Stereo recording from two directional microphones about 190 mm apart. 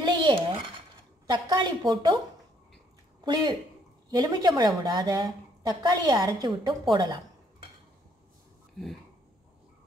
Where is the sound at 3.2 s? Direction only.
20° right (ahead or behind).